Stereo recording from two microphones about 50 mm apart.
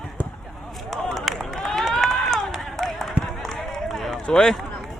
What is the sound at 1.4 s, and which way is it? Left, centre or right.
Run, centre.